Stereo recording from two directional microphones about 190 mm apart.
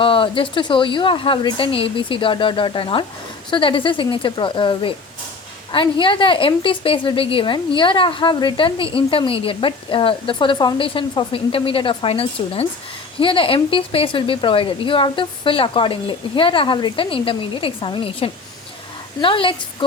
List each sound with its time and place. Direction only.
0.0 s a woman's voice: 30° left (ahead or behind)